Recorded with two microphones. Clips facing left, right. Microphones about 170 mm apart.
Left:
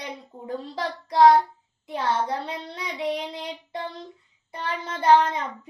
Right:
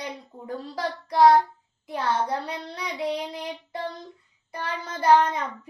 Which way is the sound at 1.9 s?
25° left (ahead or behind).